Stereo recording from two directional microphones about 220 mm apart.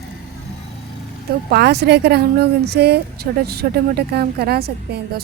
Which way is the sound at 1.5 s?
50° right (ahead or behind).